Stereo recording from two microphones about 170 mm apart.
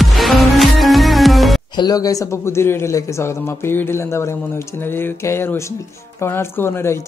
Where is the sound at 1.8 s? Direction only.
20° left (ahead or behind).